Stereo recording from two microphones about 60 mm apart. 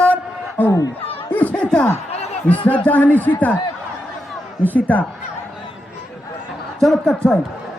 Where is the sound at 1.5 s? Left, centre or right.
Centre.